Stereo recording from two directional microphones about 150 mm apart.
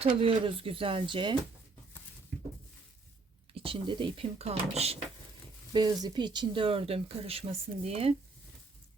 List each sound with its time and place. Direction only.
0.0 s speech: 40° right (ahead or behind)
3.5 s speech: 35° right (ahead or behind)
5.7 s speech: 30° right (ahead or behind)